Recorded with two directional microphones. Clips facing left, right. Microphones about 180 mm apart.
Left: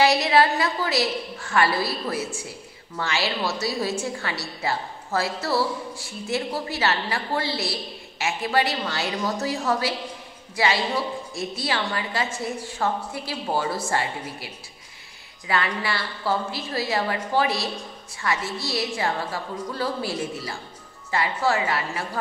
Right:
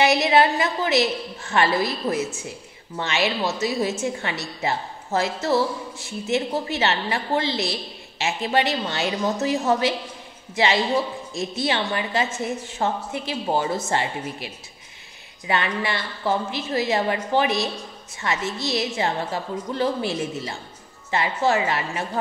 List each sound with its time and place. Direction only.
0.0 s a woman's voice: 20° right (ahead or behind)